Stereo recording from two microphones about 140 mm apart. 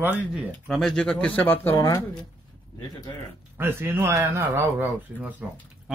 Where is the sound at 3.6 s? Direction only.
15° right (ahead or behind).